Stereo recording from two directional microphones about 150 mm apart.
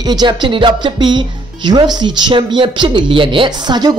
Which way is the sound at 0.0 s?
30° right (ahead or behind).